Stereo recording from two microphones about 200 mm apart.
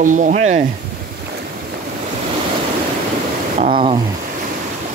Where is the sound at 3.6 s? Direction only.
25° right (ahead or behind).